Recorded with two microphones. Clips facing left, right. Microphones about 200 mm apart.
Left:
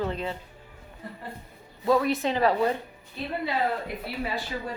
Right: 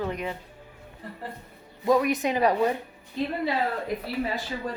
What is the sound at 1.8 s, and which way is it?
Speech, 15° right (ahead or behind).